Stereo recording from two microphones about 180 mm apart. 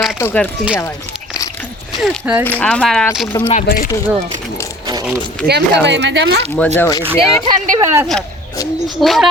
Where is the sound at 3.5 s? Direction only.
50° left (ahead or behind).